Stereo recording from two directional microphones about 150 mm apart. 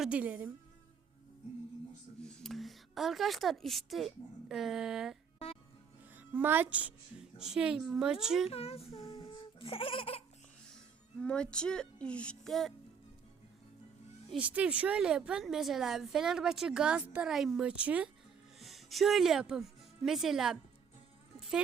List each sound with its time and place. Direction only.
0.0 s a woman's voice: 10° right (ahead or behind)
2.2 s a woman's voice: centre (ahead or behind)
6.1 s a woman's voice: 10° right (ahead or behind)
8.4 s speech: 40° left (ahead or behind)
9.0 s a sound: 35° left (ahead or behind)
11.2 s speech: 5° left (ahead or behind)
14.3 s a woman's voice: 10° right (ahead or behind)